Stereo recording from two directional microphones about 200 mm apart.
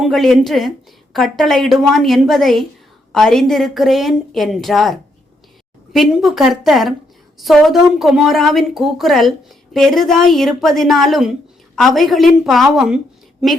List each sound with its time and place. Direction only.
0.0 s a woman's voice: centre (ahead or behind)